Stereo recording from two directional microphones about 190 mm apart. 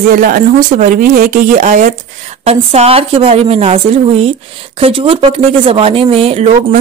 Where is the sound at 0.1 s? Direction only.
45° right (ahead or behind).